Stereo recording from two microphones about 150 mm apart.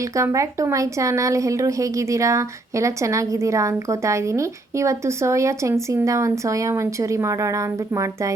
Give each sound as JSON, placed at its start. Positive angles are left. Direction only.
{"t": 0.2, "sound": "speech", "side_deg": -20}